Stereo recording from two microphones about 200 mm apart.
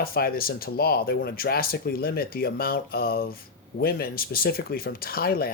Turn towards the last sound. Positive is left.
turn(degrees=50)  # may be behind; listen again after turning